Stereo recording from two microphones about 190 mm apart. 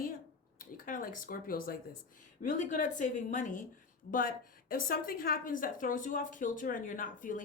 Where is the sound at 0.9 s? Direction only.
45° left (ahead or behind).